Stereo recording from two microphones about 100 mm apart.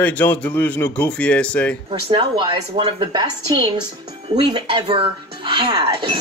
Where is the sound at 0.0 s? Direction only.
15° left (ahead or behind).